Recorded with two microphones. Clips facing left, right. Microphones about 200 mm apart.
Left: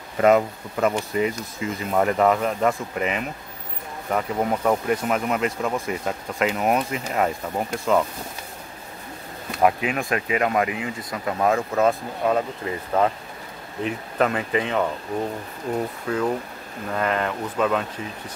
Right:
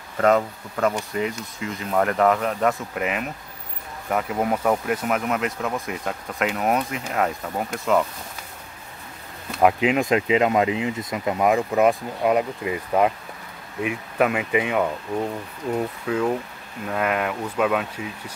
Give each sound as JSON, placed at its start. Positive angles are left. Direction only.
{"t": 0.2, "sound": "speech", "side_deg": 5}
{"t": 9.6, "sound": "speech", "side_deg": -20}
{"t": 16.1, "sound": "speech", "side_deg": -5}